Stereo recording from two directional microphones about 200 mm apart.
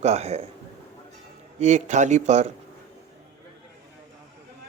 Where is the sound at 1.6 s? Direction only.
35° right (ahead or behind).